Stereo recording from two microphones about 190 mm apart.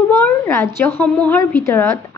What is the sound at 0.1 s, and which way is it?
A woman's voice, 15° left (ahead or behind).